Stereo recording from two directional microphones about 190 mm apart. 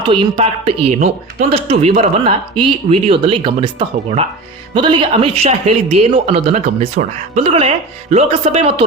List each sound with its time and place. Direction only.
0.0 s speech: 30° right (ahead or behind)
0.9 s speech: 45° right (ahead or behind)
1.5 s speech: 30° right (ahead or behind)